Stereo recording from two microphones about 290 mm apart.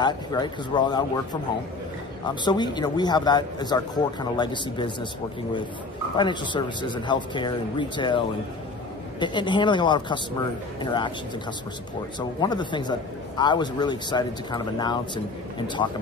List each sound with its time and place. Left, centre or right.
0.0 s a man's voice: centre
6.1 s a man's voice: centre
9.2 s a man's voice: centre
12.2 s a man's voice: centre